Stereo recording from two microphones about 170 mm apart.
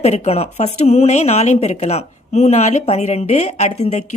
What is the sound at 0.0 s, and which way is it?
A woman's voice, 40° left (ahead or behind).